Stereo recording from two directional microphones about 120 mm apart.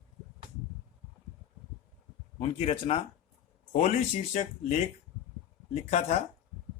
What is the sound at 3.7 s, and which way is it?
Speech, 75° left (ahead or behind).